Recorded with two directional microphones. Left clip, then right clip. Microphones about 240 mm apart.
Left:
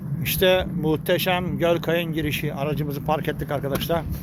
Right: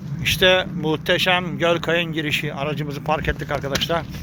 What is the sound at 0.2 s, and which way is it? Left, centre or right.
Speech, centre.